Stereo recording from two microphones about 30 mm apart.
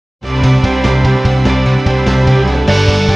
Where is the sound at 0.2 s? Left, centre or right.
Centre.